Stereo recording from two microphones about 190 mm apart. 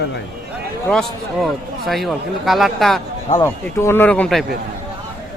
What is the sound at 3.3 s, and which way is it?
Speech, 15° left (ahead or behind).